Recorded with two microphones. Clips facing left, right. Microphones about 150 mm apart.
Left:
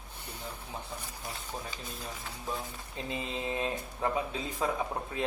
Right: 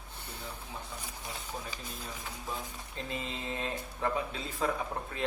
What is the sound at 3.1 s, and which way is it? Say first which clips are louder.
Mantra: left 4 dB; 20° left (ahead or behind).